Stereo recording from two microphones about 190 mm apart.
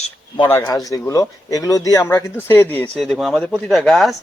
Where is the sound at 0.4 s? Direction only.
15° left (ahead or behind).